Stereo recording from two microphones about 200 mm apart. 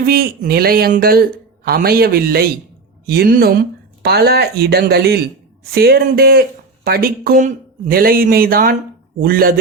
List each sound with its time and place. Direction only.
0.0 s speech: 50° right (ahead or behind)